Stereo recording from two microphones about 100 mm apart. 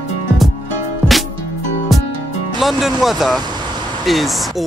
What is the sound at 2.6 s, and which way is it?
Speech, centre (ahead or behind).